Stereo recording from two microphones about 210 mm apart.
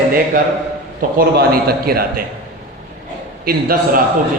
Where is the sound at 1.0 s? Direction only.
45° right (ahead or behind).